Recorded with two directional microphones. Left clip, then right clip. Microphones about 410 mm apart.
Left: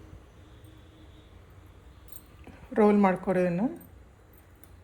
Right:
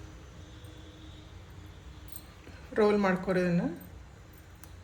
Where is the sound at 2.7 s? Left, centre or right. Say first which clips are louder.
Left 3 dB; centre.